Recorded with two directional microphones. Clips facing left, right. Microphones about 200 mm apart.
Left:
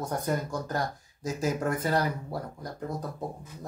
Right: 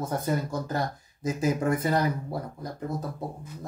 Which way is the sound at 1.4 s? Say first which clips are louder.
Right 3 dB; 10° right (ahead or behind).